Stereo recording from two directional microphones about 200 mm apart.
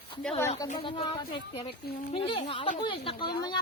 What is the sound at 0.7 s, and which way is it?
Speech, 30° left (ahead or behind).